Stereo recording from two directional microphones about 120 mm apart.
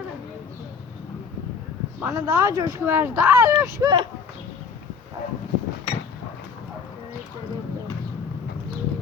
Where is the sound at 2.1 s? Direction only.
30° right (ahead or behind).